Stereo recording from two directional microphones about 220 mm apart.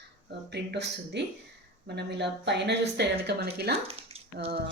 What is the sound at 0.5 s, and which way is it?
Speech, 50° right (ahead or behind).